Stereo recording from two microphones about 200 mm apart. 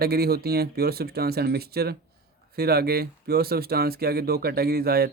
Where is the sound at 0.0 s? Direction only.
50° right (ahead or behind).